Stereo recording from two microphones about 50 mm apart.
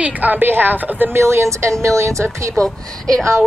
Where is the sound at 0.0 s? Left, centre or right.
Right.